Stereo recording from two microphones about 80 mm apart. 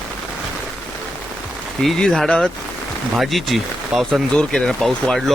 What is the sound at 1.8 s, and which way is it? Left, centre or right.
Speech, centre.